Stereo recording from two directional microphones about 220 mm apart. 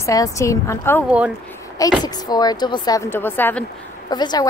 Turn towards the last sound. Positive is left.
turn(degrees=20)  # may be behind; listen again after turning